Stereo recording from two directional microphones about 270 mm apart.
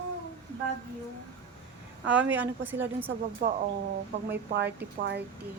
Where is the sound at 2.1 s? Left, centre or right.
Centre.